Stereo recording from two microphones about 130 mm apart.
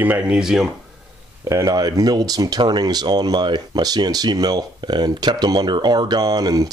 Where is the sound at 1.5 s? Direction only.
30° right (ahead or behind).